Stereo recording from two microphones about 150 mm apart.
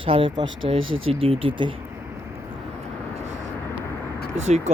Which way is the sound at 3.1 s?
50° right (ahead or behind).